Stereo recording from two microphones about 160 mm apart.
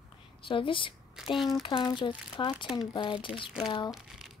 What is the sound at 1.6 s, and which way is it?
A woman's voice, 30° left (ahead or behind).